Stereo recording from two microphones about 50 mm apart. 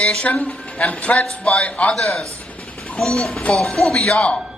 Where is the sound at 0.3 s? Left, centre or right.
Left.